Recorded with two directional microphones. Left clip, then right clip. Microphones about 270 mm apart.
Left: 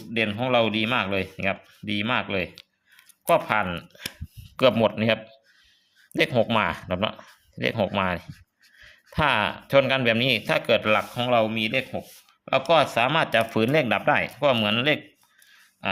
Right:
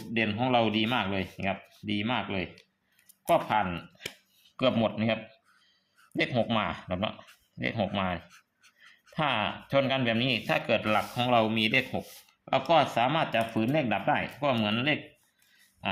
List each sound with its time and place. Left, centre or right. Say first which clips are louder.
0.1 s speech: left 4 dB; centre
12.5 s speech: left 4 dB; centre
15.8 s a sound: left 5 dB; centre